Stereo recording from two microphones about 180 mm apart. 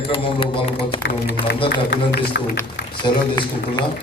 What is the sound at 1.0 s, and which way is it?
Speech, 65° left (ahead or behind).